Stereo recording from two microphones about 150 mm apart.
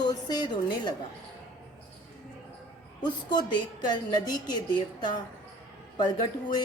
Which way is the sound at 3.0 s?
30° left (ahead or behind).